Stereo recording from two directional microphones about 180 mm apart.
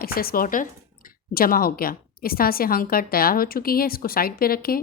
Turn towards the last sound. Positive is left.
turn(degrees=55)  # may be behind; listen again after turning